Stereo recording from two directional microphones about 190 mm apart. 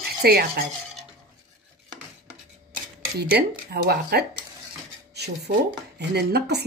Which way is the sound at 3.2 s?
55° right (ahead or behind).